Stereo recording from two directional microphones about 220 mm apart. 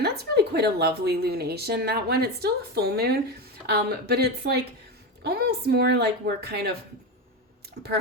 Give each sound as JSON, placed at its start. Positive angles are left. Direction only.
{"t": 0.0, "sound": "a woman's voice", "side_deg": -45}